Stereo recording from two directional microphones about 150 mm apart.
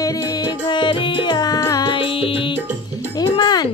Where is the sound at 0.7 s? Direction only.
35° left (ahead or behind).